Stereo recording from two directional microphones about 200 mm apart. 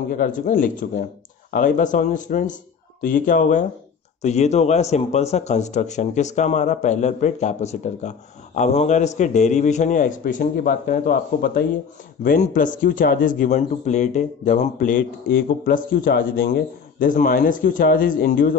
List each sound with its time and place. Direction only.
0.1 s a man's voice: 40° left (ahead or behind)